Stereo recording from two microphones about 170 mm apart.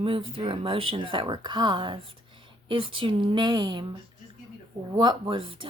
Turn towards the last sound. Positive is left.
turn(degrees=-30)  # may be behind; listen again after turning